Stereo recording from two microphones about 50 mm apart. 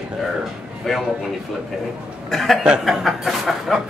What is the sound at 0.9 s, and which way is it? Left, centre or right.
Speech, centre.